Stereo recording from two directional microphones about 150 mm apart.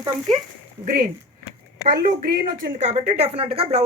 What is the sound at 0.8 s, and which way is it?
A woman's voice, 70° right (ahead or behind).